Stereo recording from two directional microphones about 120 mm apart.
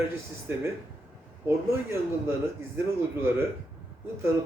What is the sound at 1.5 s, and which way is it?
Speech, 20° right (ahead or behind).